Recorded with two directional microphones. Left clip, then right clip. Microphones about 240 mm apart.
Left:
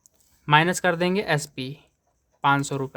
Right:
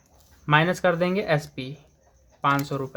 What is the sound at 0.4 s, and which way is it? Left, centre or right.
Speech, left.